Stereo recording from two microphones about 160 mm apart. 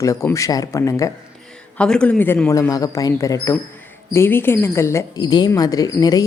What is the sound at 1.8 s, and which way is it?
Speech, 5° left (ahead or behind).